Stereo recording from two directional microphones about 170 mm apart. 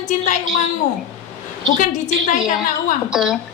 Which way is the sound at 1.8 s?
50° left (ahead or behind).